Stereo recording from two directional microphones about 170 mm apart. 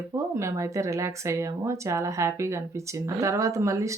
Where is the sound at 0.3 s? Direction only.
15° right (ahead or behind).